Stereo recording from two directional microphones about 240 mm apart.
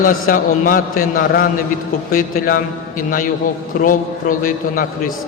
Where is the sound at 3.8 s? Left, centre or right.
Left.